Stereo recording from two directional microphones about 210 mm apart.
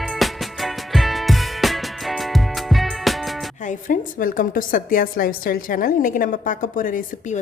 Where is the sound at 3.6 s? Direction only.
40° left (ahead or behind).